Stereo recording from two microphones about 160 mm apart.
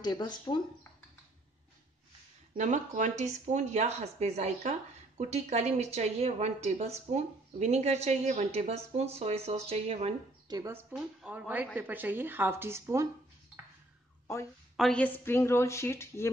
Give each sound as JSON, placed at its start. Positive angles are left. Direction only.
{"t": 0.0, "sound": "speech", "side_deg": 25}
{"t": 2.5, "sound": "speech", "side_deg": -50}
{"t": 10.5, "sound": "a woman's voice", "side_deg": -20}
{"t": 10.9, "sound": "a woman's voice", "side_deg": -10}
{"t": 14.8, "sound": "a woman's voice", "side_deg": 5}